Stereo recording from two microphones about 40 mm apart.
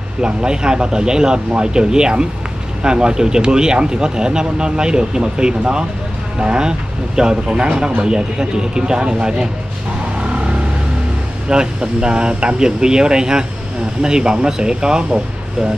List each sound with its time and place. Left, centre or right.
0.2 s speech: right
11.4 s speech: right